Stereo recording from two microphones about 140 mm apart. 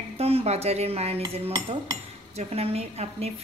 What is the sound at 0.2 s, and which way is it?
Speech, 45° right (ahead or behind).